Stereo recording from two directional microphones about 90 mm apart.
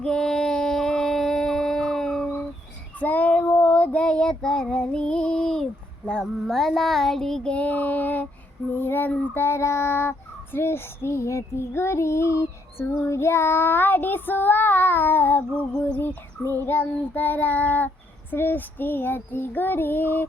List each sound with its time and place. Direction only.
0.0 s a sound: 10° left (ahead or behind)
3.0 s child singing: 20° left (ahead or behind)
3.4 s female singing: 20° left (ahead or behind)
6.1 s child singing: 5° left (ahead or behind); by 20.2 s 20° left (ahead or behind)